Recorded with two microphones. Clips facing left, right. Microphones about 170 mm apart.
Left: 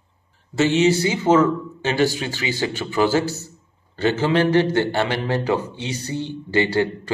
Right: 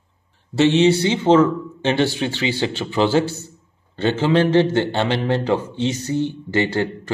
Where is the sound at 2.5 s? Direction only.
10° left (ahead or behind).